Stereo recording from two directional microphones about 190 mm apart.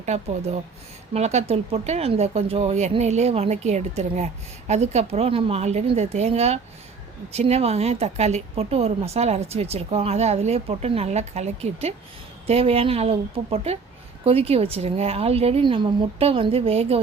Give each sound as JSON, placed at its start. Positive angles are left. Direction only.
{"t": 0.0, "sound": "speech", "side_deg": -35}